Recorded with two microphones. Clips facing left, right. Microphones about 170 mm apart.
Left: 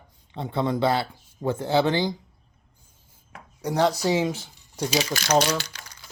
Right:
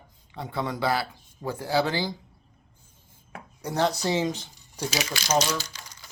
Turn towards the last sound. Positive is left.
turn(degrees=60)  # may be behind; listen again after turning